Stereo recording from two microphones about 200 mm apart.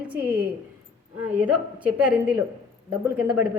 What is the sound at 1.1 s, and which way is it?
A woman's voice, 5° right (ahead or behind).